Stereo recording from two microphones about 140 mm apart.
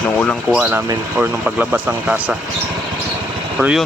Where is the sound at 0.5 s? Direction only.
10° right (ahead or behind).